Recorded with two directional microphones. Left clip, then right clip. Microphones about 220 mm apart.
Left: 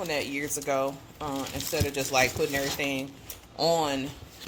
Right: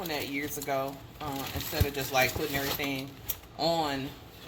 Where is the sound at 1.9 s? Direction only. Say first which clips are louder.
Left 2 dB; 50° left (ahead or behind).